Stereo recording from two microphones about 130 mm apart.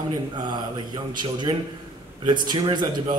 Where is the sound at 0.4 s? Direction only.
35° right (ahead or behind).